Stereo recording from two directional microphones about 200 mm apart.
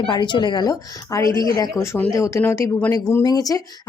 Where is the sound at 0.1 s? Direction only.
25° left (ahead or behind).